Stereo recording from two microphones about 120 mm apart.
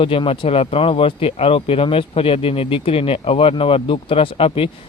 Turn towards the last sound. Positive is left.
turn(degrees=50)  # may be behind; listen again after turning